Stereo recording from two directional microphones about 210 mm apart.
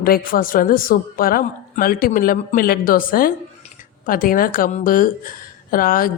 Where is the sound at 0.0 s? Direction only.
45° left (ahead or behind).